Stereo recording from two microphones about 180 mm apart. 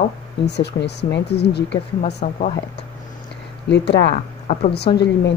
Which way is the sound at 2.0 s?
40° left (ahead or behind).